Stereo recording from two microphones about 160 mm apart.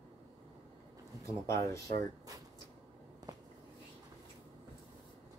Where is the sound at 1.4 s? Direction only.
20° left (ahead or behind).